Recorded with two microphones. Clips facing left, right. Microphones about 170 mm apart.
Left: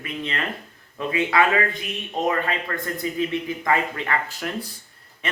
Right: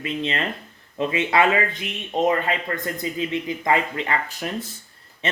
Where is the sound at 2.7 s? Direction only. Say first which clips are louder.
Even; 25° right (ahead or behind).